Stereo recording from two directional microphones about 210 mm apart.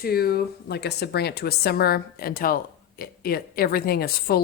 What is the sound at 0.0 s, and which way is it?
Speech, 45° left (ahead or behind).